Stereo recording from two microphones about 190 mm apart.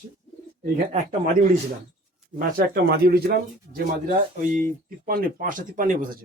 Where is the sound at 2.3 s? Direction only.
50° right (ahead or behind).